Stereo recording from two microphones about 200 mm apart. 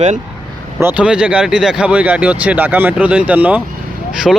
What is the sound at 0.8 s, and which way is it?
Speech, 10° right (ahead or behind).